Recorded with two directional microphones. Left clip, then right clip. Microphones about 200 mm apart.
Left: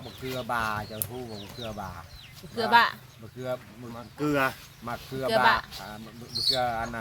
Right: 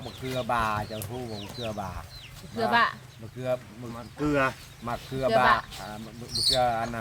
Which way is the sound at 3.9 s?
55° left (ahead or behind).